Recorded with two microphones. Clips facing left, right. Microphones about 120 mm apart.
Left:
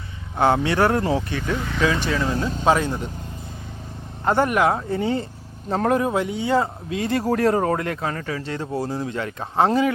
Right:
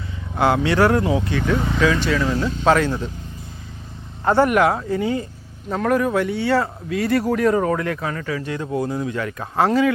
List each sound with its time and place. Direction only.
0.3 s speech: 25° left (ahead or behind)
1.4 s speech: 50° right (ahead or behind)
2.0 s speech: 35° left (ahead or behind)
2.6 s speech: 15° left (ahead or behind)
4.3 s speech: 20° left (ahead or behind)
7.3 s speech: 40° left (ahead or behind)